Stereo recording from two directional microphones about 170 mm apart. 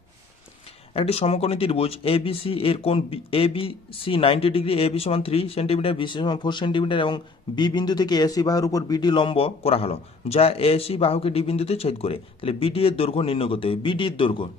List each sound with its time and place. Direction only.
0.9 s speech: 35° left (ahead or behind)